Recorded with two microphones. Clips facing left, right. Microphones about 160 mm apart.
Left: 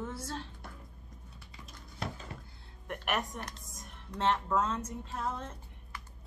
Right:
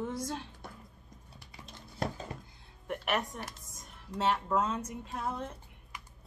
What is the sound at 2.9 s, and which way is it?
Speech, centre (ahead or behind).